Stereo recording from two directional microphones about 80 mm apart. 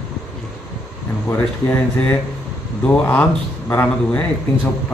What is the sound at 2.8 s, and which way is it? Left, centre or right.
Speech, centre.